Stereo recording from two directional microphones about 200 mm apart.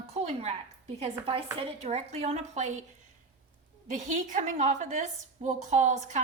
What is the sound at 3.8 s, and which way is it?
A woman's voice, 40° right (ahead or behind).